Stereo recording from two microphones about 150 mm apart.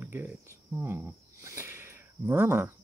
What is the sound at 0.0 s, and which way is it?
Speech, 10° right (ahead or behind).